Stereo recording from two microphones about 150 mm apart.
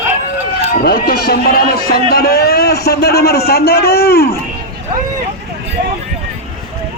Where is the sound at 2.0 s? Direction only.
90° left.